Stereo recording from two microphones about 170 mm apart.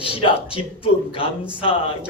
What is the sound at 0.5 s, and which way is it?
Speech, 30° left (ahead or behind).